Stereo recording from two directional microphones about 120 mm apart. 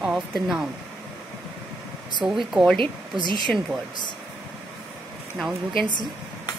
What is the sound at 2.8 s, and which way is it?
Speech, 40° right (ahead or behind).